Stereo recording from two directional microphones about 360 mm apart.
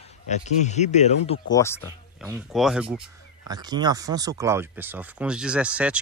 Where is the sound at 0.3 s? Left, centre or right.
Centre.